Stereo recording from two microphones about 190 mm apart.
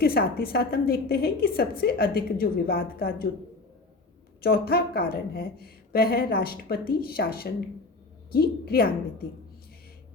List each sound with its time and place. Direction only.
0.0 s a woman's voice: 55° left (ahead or behind)
4.4 s a woman's voice: 55° left (ahead or behind)